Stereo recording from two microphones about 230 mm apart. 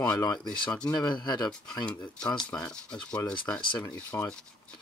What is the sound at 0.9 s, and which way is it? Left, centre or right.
Speech, centre.